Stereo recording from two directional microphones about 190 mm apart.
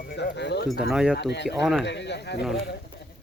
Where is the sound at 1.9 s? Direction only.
65° left (ahead or behind).